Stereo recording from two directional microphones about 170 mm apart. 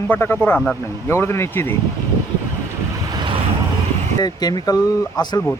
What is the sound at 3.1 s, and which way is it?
Vehicle, 25° right (ahead or behind).